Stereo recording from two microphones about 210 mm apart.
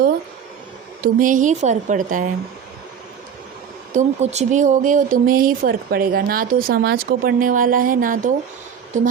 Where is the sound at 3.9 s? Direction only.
30° right (ahead or behind).